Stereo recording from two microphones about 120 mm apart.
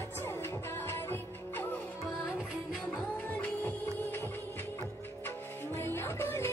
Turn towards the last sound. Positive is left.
turn(degrees=20)  # may be behind; listen again after turning